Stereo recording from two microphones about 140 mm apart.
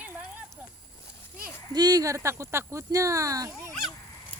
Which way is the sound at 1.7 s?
30° right (ahead or behind).